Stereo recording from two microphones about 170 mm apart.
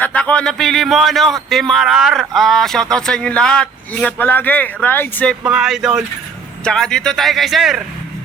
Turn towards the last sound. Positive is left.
turn(degrees=0)  # may be behind; listen again after turning